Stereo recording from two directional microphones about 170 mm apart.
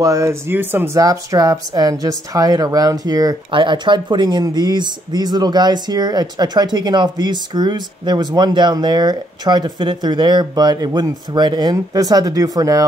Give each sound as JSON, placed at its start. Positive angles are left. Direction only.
{"t": 0.0, "sound": "speech", "side_deg": -20}